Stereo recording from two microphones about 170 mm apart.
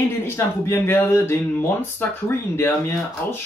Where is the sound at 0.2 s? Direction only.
15° left (ahead or behind).